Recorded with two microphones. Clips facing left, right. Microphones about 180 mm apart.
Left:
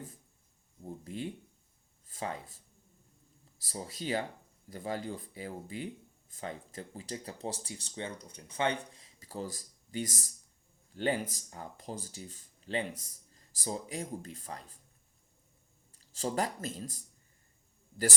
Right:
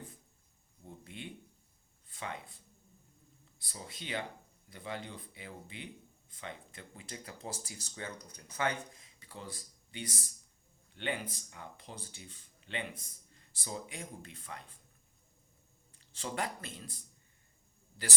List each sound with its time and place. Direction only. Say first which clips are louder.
0.9 s a sound: left 8 dB; 35° left (ahead or behind)
2.0 s speech: left 5 dB; 40° left (ahead or behind)
3.7 s speech: left 7 dB; 35° left (ahead or behind)
16.0 s speech: left 5 dB; 40° left (ahead or behind)